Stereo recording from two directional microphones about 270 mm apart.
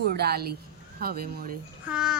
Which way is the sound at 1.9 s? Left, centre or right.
Centre.